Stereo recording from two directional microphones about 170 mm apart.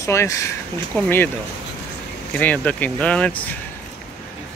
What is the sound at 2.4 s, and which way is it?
Speech, 10° left (ahead or behind).